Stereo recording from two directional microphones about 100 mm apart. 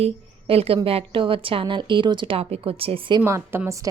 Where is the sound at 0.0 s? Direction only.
80° right.